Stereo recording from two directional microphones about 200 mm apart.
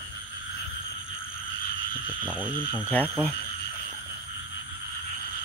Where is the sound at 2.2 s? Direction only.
10° right (ahead or behind).